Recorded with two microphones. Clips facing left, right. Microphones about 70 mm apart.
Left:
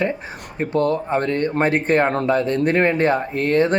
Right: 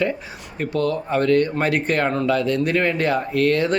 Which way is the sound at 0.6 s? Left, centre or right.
Left.